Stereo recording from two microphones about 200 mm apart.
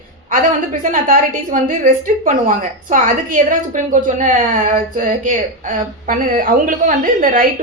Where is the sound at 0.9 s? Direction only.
40° right (ahead or behind).